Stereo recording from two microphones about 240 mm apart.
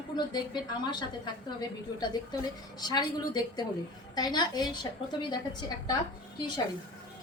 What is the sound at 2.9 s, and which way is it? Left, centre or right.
Speech, centre.